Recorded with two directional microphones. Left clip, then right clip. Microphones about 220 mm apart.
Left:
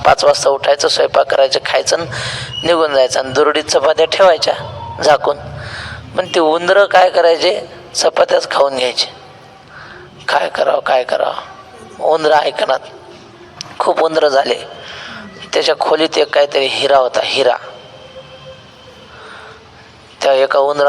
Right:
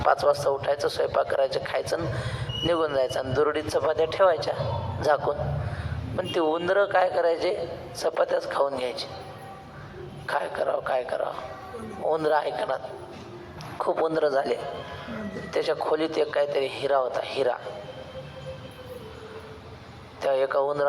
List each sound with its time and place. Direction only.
0.0 s a man's voice: 45° left (ahead or behind)
10.2 s a man's voice: 45° left (ahead or behind)
20.1 s speech: 45° left (ahead or behind)